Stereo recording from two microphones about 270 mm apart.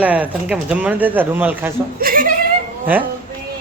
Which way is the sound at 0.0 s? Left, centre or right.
Centre.